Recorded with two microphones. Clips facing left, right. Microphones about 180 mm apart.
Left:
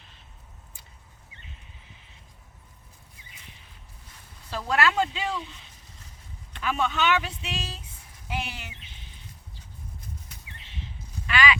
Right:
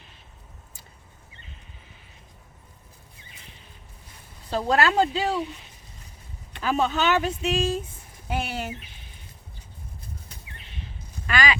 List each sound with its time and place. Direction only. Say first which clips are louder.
4.5 s speech: right 4 dB; 35° right (ahead or behind)
6.6 s speech: right 3 dB; 40° right (ahead or behind)
11.3 s a sound: even; 40° right (ahead or behind)